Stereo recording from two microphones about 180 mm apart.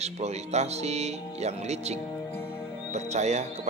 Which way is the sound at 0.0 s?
35° right (ahead or behind).